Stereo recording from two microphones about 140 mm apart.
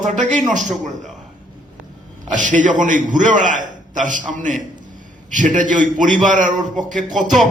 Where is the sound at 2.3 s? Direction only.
65° right (ahead or behind).